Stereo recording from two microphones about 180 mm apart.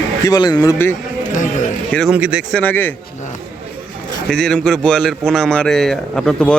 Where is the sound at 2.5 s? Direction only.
10° left (ahead or behind).